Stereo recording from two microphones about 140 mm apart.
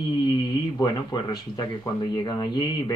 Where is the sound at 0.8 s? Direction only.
30° left (ahead or behind).